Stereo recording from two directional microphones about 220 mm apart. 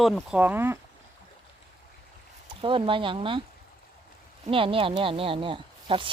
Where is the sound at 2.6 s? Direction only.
25° right (ahead or behind).